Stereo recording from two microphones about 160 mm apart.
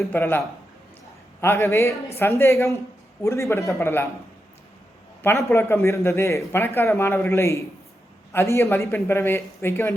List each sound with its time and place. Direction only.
0.1 s a man's voice: 15° left (ahead or behind)
5.2 s a man's voice: 15° left (ahead or behind)